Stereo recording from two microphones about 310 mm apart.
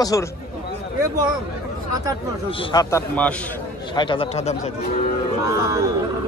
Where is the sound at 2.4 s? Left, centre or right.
Centre.